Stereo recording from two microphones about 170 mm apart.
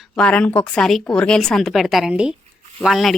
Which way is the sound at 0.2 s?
5° left (ahead or behind).